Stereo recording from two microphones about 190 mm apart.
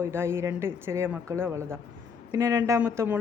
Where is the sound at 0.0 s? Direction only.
15° right (ahead or behind).